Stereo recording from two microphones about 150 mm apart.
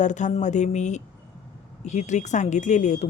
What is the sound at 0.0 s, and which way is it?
Speech, 55° left (ahead or behind).